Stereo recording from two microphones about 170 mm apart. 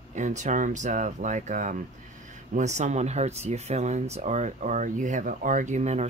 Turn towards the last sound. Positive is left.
turn(degrees=-40)  # may be behind; listen again after turning